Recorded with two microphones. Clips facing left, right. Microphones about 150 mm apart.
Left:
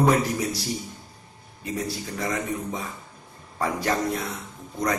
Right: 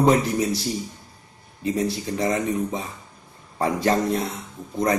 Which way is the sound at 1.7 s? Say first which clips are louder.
Right 4 dB; 25° right (ahead or behind).